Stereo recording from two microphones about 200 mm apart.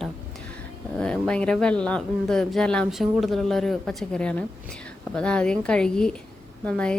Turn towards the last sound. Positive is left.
turn(degrees=5)  # may be behind; listen again after turning